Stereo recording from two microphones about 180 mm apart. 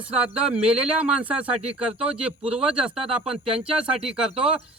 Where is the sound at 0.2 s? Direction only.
5° right (ahead or behind).